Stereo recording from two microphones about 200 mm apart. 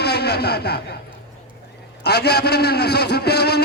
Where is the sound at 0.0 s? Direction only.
55° left (ahead or behind).